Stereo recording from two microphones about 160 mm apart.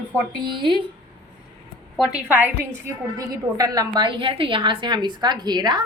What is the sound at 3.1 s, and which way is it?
A woman's voice, 25° right (ahead or behind).